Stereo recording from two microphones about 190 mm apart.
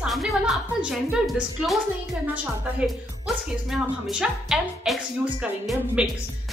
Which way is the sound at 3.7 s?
5° right (ahead or behind).